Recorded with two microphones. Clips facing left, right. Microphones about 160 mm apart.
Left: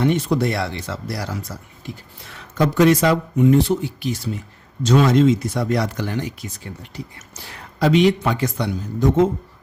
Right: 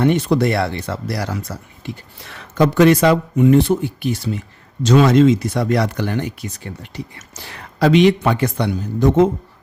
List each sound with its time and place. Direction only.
0.0 s speech: 65° right (ahead or behind)
4.9 s speech: 85° right; by 6.5 s 60° right (ahead or behind)
7.8 s speech: 75° right (ahead or behind)